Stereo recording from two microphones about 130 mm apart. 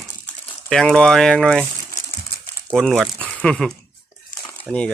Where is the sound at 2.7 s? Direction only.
Centre (ahead or behind).